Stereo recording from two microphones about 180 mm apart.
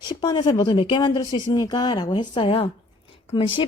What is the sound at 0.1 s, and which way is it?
A woman's voice, 25° left (ahead or behind).